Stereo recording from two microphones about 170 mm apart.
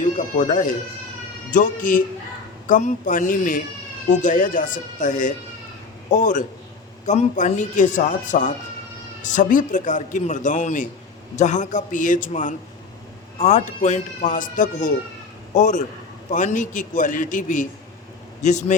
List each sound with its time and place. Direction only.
0.2 s a man's voice: 45° left (ahead or behind)